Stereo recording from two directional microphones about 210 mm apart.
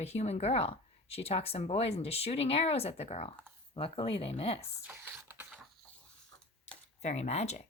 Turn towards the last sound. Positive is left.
turn(degrees=30)  # may be behind; listen again after turning